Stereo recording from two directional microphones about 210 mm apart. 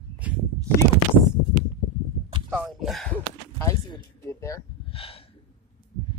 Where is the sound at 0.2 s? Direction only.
5° right (ahead or behind).